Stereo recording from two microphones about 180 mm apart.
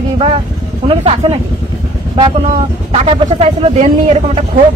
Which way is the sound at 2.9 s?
35° right (ahead or behind).